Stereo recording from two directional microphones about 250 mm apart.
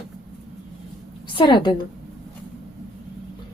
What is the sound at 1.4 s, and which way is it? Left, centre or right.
Speech, centre.